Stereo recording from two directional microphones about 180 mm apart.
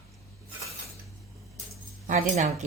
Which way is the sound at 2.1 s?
45° right (ahead or behind).